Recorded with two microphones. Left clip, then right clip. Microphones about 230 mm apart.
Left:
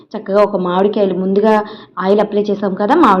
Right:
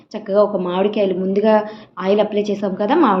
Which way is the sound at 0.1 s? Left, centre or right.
Centre.